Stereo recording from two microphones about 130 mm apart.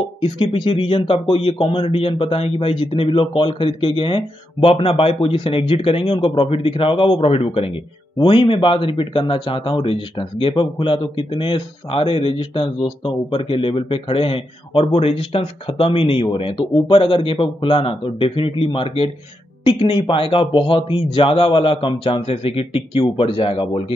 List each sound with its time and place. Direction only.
0.2 s a man's voice: 45° left (ahead or behind)